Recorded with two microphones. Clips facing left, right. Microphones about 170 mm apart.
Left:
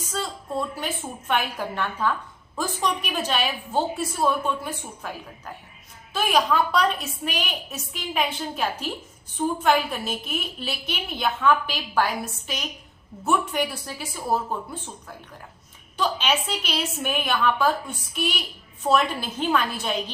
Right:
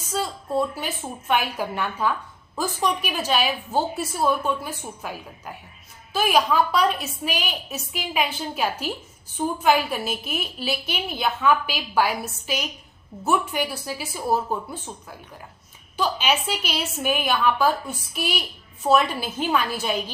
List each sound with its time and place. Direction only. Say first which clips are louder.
0.1 s a sound: right 4 dB; 5° right (ahead or behind)
1.3 s a woman's voice: right 2 dB; 5° right (ahead or behind)
16.0 s a woman's voice: right 1 dB; 5° right (ahead or behind)